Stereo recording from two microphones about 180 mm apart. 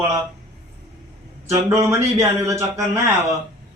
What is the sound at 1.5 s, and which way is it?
A man's voice, 15° right (ahead or behind).